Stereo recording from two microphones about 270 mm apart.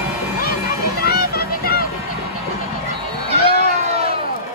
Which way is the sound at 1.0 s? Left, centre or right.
Left.